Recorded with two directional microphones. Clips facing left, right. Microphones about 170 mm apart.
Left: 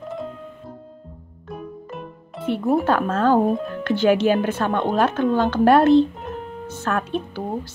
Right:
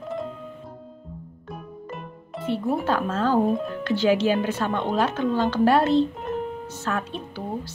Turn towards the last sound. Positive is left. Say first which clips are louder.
# left 5 dB
turn(degrees=55)  # may be behind; listen again after turning